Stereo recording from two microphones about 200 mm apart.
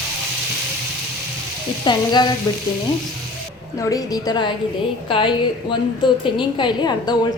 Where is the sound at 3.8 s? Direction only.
20° left (ahead or behind).